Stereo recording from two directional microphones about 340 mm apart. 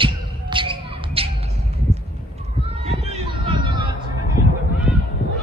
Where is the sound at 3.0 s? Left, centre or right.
Centre.